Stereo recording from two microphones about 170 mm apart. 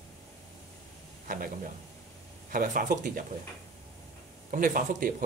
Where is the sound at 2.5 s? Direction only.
55° right (ahead or behind).